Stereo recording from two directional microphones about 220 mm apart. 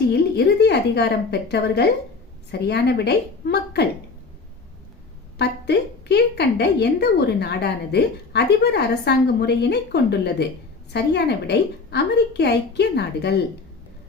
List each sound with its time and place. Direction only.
0.1 s a woman's voice: 50° left (ahead or behind)
5.4 s a woman's voice: 50° left (ahead or behind)